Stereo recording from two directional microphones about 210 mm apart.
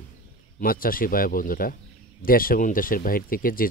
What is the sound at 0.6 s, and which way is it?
Speech, 45° left (ahead or behind).